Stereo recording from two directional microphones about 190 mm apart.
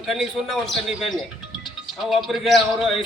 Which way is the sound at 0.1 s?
Centre (ahead or behind).